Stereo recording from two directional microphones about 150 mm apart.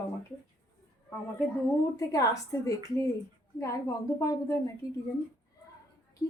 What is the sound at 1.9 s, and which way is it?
A woman's voice, 25° left (ahead or behind).